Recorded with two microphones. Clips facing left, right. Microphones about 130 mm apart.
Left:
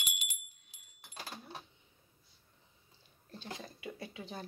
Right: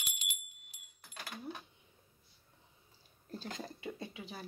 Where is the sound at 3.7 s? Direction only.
25° right (ahead or behind).